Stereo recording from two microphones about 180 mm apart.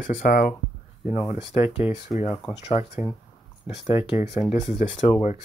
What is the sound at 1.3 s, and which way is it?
Speech, 30° left (ahead or behind).